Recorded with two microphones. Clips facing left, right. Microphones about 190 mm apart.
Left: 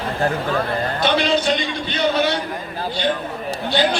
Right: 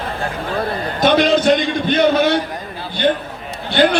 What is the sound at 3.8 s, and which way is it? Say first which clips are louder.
Speech: right 6 dB; 60° right (ahead or behind).